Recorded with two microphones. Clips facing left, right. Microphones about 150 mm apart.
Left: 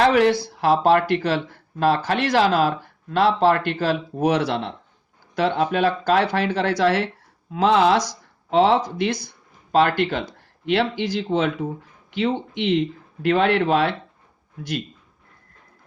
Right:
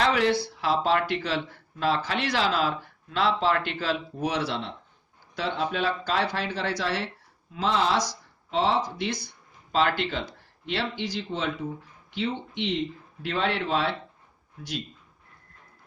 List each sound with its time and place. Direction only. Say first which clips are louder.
0.0 s speech: left 7 dB; 50° left (ahead or behind)